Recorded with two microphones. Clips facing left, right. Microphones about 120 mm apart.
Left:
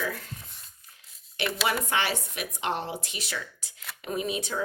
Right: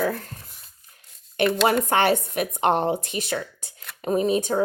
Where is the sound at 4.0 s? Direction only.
40° right (ahead or behind).